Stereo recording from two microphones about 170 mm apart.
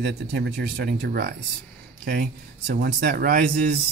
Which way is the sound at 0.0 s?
90° right.